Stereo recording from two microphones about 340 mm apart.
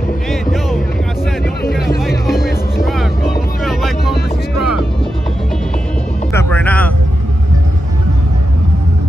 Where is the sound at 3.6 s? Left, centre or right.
Centre.